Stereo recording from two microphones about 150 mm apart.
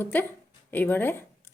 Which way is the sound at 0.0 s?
15° left (ahead or behind).